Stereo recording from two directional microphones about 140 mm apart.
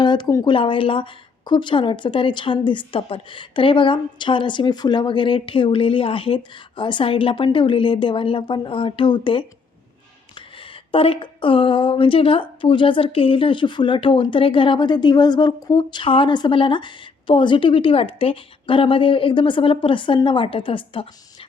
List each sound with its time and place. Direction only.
0.0 s speech: 30° left (ahead or behind)